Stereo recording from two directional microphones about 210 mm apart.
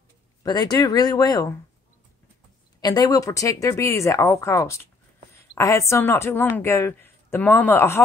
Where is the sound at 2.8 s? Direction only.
20° left (ahead or behind).